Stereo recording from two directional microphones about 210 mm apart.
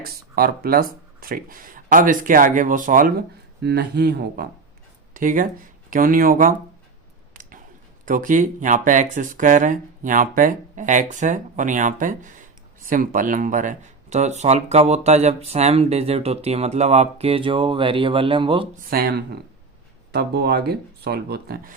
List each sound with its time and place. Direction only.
0.0 s speech: 45° right (ahead or behind)
7.3 s a sound: 40° right (ahead or behind)
8.0 s speech: 40° right (ahead or behind)
18.9 s speech: 45° right (ahead or behind)